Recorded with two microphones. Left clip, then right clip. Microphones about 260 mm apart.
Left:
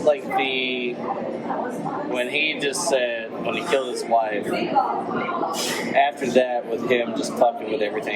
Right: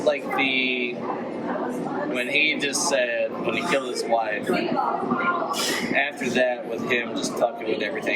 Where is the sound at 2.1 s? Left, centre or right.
Centre.